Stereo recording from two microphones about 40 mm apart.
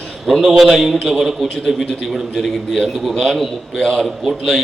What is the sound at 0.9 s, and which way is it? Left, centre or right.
Speech, centre.